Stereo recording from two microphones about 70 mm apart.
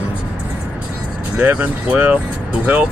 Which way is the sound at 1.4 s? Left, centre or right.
Right.